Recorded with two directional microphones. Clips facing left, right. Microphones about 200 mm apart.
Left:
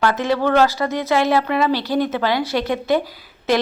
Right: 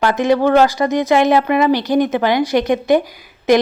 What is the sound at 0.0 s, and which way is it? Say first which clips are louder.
Speech: right 4 dB; 15° right (ahead or behind).